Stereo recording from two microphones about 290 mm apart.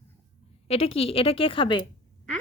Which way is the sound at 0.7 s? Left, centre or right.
Centre.